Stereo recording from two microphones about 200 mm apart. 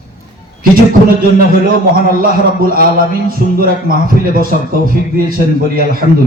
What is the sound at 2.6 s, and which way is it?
A man's voice, 45° right (ahead or behind).